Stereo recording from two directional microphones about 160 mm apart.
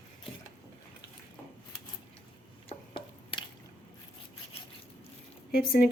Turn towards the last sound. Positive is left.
turn(degrees=70)  # may be behind; listen again after turning